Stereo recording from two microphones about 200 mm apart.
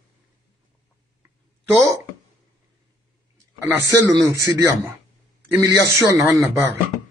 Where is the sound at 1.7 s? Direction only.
15° right (ahead or behind).